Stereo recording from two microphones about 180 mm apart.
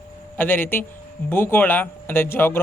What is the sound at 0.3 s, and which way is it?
Speech, 10° left (ahead or behind).